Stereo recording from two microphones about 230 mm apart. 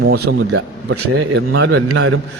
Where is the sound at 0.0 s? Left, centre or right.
Right.